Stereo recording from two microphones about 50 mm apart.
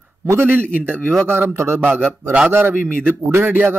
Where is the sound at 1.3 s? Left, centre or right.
Right.